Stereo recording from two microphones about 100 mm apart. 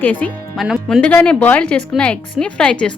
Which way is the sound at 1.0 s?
10° left (ahead or behind).